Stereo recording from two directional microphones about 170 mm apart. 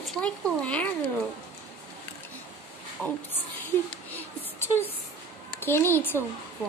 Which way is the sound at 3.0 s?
10° left (ahead or behind).